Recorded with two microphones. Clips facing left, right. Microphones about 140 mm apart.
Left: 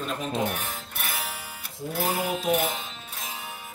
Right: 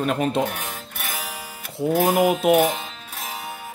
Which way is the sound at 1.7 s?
75° right (ahead or behind).